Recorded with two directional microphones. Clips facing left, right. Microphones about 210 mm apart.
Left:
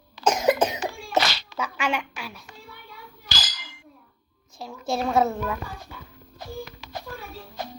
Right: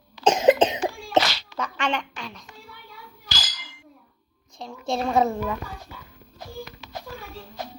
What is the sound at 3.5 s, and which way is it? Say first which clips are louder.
Clang: left 1 dB; 70° left (ahead or behind).